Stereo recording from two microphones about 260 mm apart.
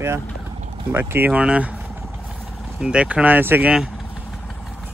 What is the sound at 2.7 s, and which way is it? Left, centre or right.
Speech, centre.